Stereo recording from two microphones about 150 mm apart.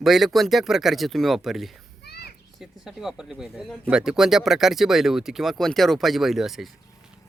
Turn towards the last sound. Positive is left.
turn(degrees=0)  # may be behind; listen again after turning